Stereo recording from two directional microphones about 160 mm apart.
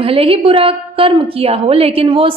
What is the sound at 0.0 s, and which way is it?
A woman's voice, 35° right (ahead or behind).